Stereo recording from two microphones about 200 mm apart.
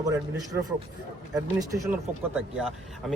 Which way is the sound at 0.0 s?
15° right (ahead or behind).